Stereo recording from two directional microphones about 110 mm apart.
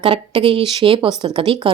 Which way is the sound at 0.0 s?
55° right (ahead or behind).